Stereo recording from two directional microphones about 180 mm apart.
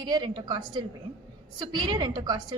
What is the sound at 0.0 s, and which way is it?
A woman's voice, 25° right (ahead or behind).